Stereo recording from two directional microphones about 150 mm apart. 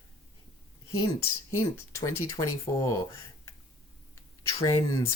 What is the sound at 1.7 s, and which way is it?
Speech, 20° left (ahead or behind).